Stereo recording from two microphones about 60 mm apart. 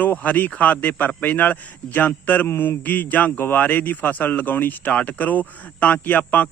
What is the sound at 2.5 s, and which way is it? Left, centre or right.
Mantra, left.